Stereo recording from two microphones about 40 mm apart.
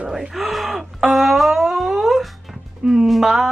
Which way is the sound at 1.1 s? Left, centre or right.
Centre.